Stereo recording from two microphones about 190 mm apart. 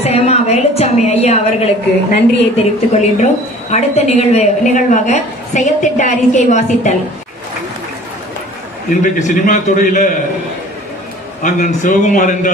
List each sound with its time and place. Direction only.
0.0 s a woman's voice: 35° left (ahead or behind)
9.0 s a man's voice: 40° left (ahead or behind)
11.4 s a woman's voice: 40° left (ahead or behind)